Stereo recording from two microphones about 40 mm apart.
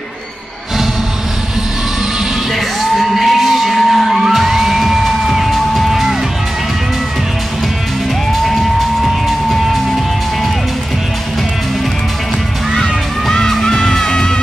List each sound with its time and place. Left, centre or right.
3.0 s music: centre
12.7 s music: centre